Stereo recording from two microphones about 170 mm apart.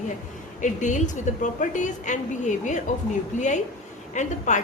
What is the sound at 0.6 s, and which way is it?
A woman's voice, 45° left (ahead or behind).